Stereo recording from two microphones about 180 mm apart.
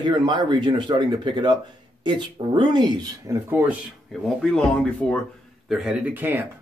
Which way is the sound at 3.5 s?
10° right (ahead or behind).